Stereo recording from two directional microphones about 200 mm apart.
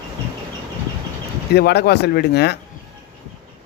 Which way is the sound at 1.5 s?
55° left (ahead or behind).